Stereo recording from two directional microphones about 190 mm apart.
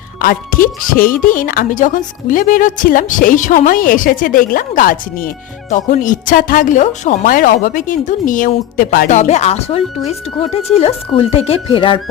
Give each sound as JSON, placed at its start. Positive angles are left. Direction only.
{"t": 0.2, "sound": "speech", "side_deg": 50}